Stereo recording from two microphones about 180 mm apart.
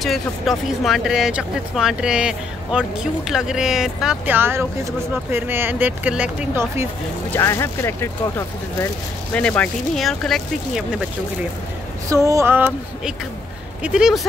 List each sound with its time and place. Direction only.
0.0 s speech: centre (ahead or behind)
7.2 s speech: 15° left (ahead or behind)
12.1 s speech: 15° right (ahead or behind)